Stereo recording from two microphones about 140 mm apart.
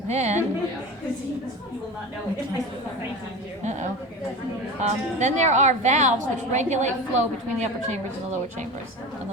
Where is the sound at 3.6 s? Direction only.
55° right (ahead or behind).